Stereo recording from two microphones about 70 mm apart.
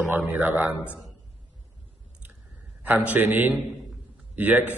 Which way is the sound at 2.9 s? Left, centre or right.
Right.